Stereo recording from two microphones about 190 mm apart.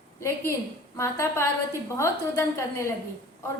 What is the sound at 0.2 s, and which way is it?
A woman's voice, 15° left (ahead or behind).